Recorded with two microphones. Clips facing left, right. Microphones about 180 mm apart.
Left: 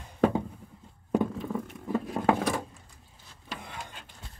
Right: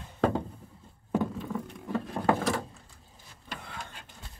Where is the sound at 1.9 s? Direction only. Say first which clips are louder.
Left 2 dB; 10° left (ahead or behind).